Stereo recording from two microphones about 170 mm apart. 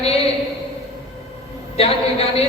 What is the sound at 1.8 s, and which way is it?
Speech, 35° left (ahead or behind).